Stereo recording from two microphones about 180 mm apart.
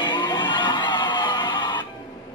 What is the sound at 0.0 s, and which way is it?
Music, 25° left (ahead or behind).